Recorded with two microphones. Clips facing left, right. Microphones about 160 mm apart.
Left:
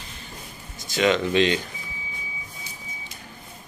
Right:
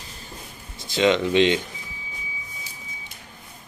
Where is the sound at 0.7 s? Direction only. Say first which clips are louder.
Right 2 dB; 25° right (ahead or behind).